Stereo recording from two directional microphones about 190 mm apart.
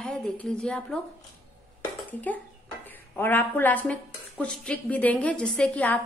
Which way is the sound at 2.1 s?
10° left (ahead or behind).